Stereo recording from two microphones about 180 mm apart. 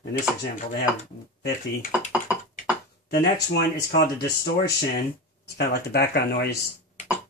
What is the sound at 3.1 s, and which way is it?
Speech, 70° left (ahead or behind).